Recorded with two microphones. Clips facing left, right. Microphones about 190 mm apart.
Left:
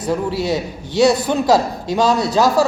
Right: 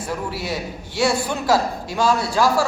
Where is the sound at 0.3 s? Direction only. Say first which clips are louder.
Left 7 dB; 20° left (ahead or behind).